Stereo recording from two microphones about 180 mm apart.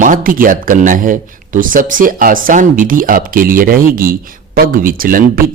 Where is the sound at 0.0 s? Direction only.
50° right (ahead or behind).